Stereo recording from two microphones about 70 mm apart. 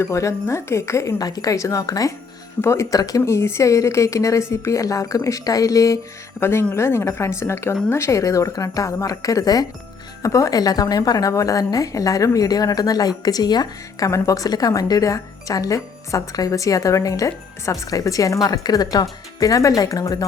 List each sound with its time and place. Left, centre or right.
0.0 s speech: left
1.2 s speech: left
2.6 s speech: left
2.9 s speech: left
3.2 s speech: left
6.4 s speech: left
14.1 s speech: left